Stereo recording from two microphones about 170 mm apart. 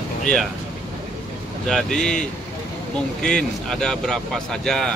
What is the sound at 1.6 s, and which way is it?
Speech, 5° left (ahead or behind).